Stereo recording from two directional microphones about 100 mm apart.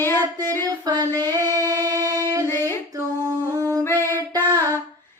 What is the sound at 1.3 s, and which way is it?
Singing, 40° right (ahead or behind).